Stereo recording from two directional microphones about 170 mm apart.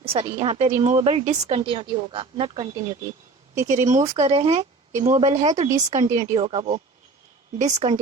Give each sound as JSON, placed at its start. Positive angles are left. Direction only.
{"t": 0.0, "sound": "speech", "side_deg": -35}
{"t": 3.7, "sound": "speech", "side_deg": -45}
{"t": 6.3, "sound": "speech", "side_deg": -30}